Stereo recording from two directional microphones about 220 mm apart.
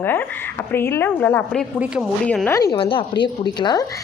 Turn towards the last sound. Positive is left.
turn(degrees=20)  # may be behind; listen again after turning